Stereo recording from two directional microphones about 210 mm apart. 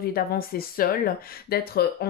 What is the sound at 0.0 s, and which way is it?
Speech, 45° left (ahead or behind).